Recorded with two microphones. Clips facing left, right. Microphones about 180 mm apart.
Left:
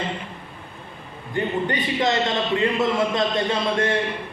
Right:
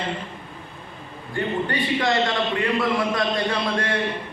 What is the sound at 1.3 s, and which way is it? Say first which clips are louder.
A man's voice: left 1 dB; 20° left (ahead or behind).